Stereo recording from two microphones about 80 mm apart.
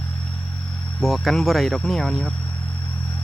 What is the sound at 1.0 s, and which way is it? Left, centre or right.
Speech, centre.